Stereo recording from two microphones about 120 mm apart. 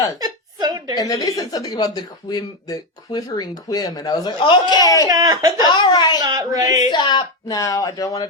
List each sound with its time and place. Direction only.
0.2 s a sound: 35° right (ahead or behind)
0.9 s speech: 30° left (ahead or behind)
5.0 s speech: 30° right (ahead or behind)
5.6 s speech: 40° left (ahead or behind)
6.1 s speech: 30° right (ahead or behind)
6.9 s speech: 40° left (ahead or behind)